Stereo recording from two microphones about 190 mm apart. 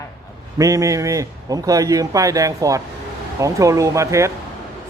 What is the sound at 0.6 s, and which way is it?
A man's voice, 20° right (ahead or behind).